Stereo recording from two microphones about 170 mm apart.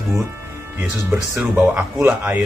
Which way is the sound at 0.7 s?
10° right (ahead or behind).